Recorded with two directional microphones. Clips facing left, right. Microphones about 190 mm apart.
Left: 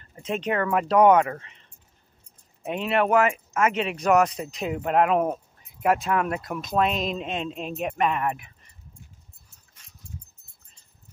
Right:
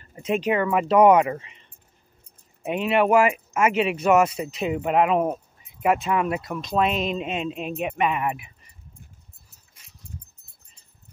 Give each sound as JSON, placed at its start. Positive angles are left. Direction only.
{"t": 0.0, "sound": "speech", "side_deg": -10}